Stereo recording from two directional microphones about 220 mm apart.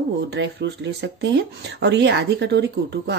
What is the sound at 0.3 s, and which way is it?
A woman's voice, 50° right (ahead or behind).